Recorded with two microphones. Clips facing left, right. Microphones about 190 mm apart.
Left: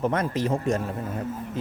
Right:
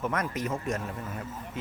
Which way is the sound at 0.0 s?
30° left (ahead or behind).